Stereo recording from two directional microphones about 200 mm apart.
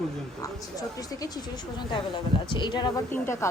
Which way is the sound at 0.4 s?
20° left (ahead or behind).